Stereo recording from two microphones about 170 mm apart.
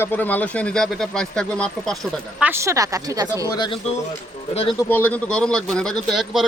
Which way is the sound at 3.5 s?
25° left (ahead or behind).